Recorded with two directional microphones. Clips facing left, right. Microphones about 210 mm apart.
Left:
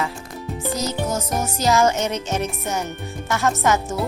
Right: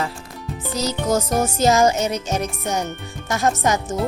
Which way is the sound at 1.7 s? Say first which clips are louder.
Left 1 dB; 15° right (ahead or behind).